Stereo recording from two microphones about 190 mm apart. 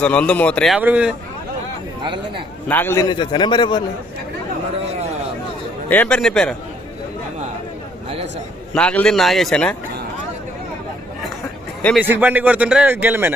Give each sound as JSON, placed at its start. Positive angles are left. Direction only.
{"t": 0.0, "sound": "a man's voice", "side_deg": 5}
{"t": 0.8, "sound": "a man's voice", "side_deg": -5}
{"t": 2.6, "sound": "a man's voice", "side_deg": 10}
{"t": 5.9, "sound": "a man's voice", "side_deg": 5}
{"t": 8.7, "sound": "a man's voice", "side_deg": 5}
{"t": 11.9, "sound": "a man's voice", "side_deg": -10}